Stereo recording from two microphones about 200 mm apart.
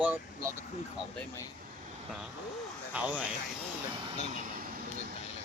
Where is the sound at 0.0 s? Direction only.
10° right (ahead or behind).